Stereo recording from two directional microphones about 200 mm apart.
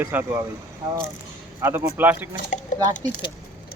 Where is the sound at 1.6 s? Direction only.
10° right (ahead or behind).